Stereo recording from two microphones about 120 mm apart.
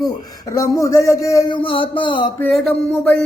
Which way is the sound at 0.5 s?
30° left (ahead or behind).